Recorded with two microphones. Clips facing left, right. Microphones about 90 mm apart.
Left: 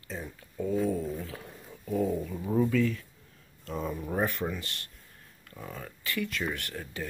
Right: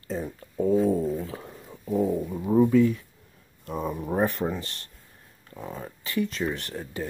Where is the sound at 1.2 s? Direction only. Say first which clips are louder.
Right 5 dB; 25° right (ahead or behind).